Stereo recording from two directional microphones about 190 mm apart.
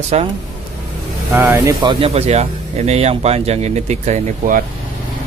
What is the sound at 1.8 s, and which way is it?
Speech, 25° right (ahead or behind).